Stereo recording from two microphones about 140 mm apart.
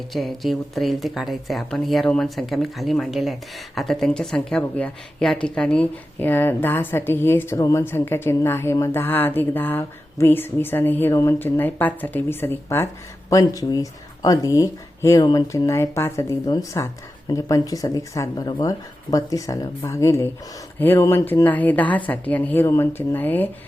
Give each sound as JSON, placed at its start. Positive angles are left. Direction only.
{"t": 0.1, "sound": "a woman's voice", "side_deg": 0}